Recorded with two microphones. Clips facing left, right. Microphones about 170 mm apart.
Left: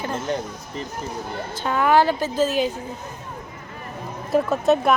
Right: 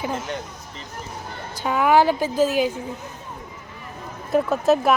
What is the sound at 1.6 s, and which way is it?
A woman's voice, 10° right (ahead or behind).